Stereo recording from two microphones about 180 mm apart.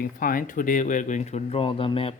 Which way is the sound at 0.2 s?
50° left (ahead or behind).